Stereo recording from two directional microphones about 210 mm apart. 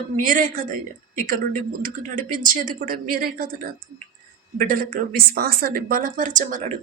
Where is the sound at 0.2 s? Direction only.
40° right (ahead or behind).